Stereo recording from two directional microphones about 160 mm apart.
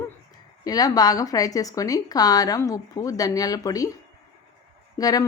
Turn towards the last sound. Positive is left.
turn(degrees=25)  # may be behind; listen again after turning